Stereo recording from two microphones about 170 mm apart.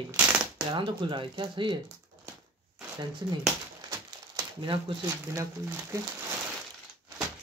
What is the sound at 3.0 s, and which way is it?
Speech, 25° right (ahead or behind).